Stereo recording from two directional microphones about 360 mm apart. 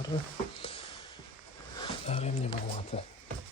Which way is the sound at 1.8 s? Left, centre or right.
Centre.